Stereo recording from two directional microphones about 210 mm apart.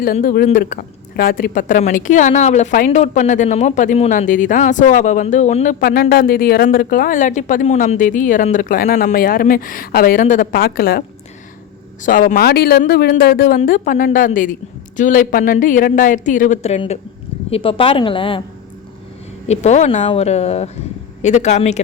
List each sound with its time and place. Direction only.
0.0 s speech: 45° left (ahead or behind)
5.8 s speech: 45° left (ahead or behind)
12.0 s a woman's voice: 40° left (ahead or behind); by 18.4 s 25° left (ahead or behind)
19.5 s speech: 30° left (ahead or behind)